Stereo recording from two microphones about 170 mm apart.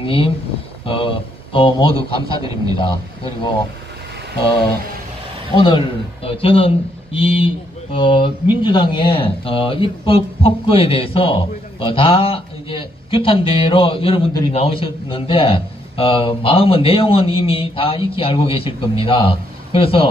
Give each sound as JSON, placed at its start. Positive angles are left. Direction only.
{"t": 0.0, "sound": "speech", "side_deg": 30}
{"t": 2.4, "sound": "a man's voice", "side_deg": -20}
{"t": 5.6, "sound": "a man's voice", "side_deg": 30}